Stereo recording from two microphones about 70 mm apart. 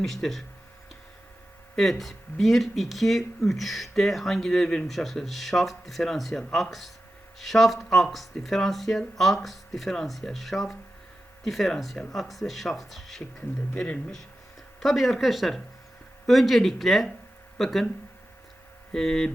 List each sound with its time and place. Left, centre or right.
0.0 s speech: centre
1.7 s speech: centre
13.7 s hum: centre
14.8 s speech: centre
18.9 s hum: centre